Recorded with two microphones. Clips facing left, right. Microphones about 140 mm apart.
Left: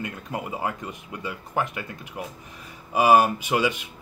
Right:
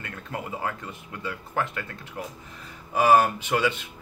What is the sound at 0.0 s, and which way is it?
Speech, 15° left (ahead or behind).